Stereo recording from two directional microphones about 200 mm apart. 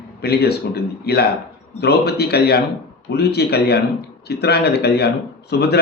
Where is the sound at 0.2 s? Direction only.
55° left (ahead or behind).